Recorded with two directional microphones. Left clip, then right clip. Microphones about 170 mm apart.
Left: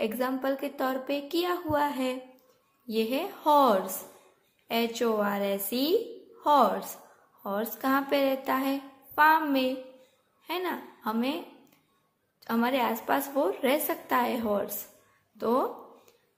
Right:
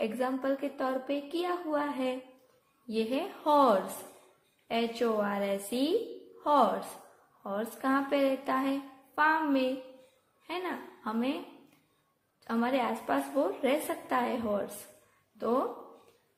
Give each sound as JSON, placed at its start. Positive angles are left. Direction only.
{"t": 0.0, "sound": "a woman's voice", "side_deg": 10}